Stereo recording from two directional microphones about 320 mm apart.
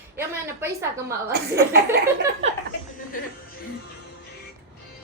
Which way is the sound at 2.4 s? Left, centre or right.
Centre.